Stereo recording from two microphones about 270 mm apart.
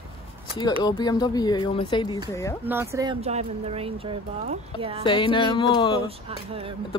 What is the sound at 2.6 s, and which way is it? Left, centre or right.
Speech, centre.